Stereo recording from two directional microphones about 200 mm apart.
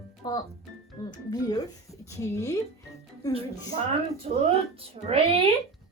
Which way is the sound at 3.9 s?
30° right (ahead or behind).